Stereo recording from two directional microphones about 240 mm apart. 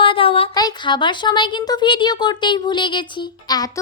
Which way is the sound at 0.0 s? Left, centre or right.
Left.